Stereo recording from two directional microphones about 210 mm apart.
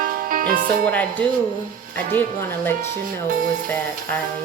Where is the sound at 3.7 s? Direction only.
5° left (ahead or behind).